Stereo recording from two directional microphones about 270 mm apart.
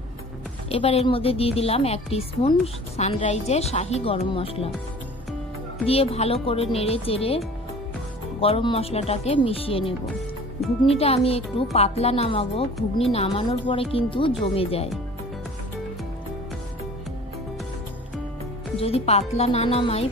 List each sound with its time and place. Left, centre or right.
0.7 s a woman's voice: left
5.9 s a woman's voice: left
18.8 s a woman's voice: left